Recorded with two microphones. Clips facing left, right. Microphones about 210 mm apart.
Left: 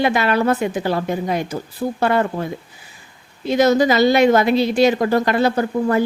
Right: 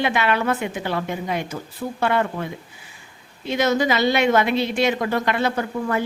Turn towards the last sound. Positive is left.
turn(degrees=40)  # may be behind; listen again after turning